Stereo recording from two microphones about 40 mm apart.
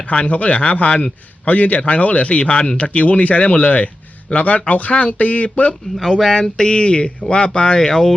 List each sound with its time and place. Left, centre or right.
0.0 s speech: left
6.3 s speech: centre
6.7 s speech: left